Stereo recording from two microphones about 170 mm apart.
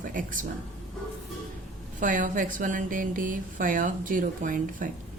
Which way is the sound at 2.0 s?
50° right (ahead or behind).